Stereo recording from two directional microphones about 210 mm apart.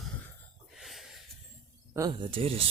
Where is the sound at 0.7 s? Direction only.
Centre (ahead or behind).